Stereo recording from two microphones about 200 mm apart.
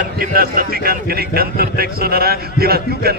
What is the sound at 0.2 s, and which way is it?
A man's voice, 45° right (ahead or behind).